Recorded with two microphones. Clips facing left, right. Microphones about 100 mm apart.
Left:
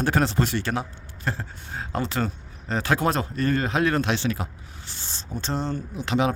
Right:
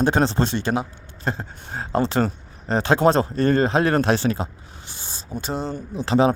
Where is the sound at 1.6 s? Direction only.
35° right (ahead or behind).